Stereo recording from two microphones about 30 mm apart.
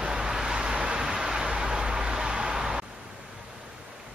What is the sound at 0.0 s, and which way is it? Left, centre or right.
Vehicle, right.